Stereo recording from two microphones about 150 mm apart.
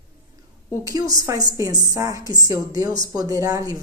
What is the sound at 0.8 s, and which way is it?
A woman's voice, 25° right (ahead or behind).